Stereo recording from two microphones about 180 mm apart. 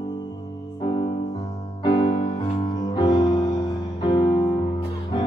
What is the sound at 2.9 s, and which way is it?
Music, 25° left (ahead or behind).